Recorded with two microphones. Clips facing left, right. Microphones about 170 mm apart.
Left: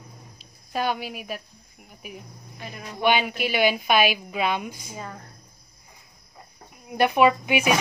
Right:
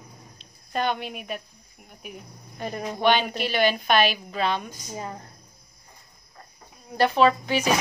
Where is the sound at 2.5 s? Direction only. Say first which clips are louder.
Right 8 dB; 45° right (ahead or behind).